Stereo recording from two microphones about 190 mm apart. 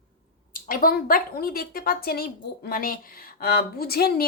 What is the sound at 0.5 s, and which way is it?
A woman's voice, 50° left (ahead or behind).